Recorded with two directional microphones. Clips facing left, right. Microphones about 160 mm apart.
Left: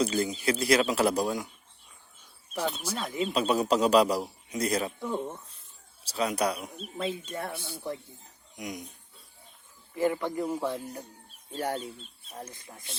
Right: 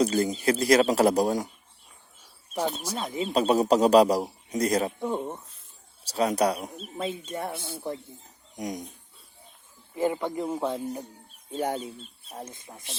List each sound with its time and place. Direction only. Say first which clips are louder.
0.0 s a man's voice: right 4 dB; 40° right (ahead or behind)
2.6 s a man's voice: even; 40° right (ahead or behind)
3.0 s speech: even; 25° right (ahead or behind)
3.3 s a man's voice: right 5 dB; 35° right (ahead or behind)
4.9 s speech: right 3 dB; 20° right (ahead or behind)
6.1 s a man's voice: right 4 dB; 40° right (ahead or behind)
6.9 s speech: right 1 dB; 25° right (ahead or behind)
8.5 s speech: right 5 dB; 45° right (ahead or behind)
9.9 s speech: right 1 dB; 20° right (ahead or behind)